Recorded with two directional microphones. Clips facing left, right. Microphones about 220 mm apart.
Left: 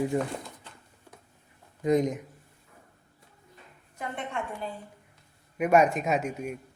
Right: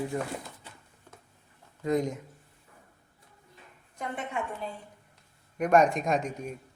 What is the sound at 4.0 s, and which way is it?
Speech, centre (ahead or behind).